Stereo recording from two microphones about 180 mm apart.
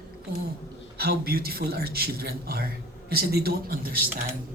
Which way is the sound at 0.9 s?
60° right (ahead or behind).